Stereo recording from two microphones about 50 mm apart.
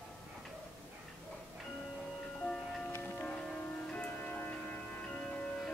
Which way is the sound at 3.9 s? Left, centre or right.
Left.